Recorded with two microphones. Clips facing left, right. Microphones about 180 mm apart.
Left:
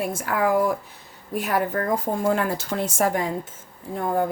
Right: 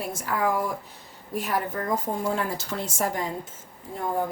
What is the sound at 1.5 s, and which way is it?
Speech, 65° left (ahead or behind).